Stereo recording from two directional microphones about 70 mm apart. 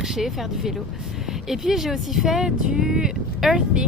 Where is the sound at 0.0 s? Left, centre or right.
Centre.